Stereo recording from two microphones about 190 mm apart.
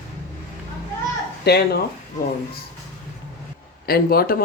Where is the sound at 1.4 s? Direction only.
60° left (ahead or behind).